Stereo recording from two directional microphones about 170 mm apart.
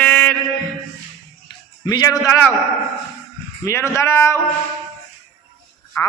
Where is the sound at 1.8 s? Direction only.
20° left (ahead or behind).